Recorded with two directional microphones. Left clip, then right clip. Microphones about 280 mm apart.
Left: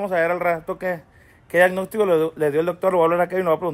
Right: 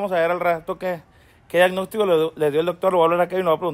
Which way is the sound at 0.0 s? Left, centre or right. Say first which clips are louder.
Even; centre.